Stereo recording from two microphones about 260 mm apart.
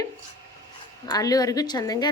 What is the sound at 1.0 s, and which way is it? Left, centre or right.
Speech, centre.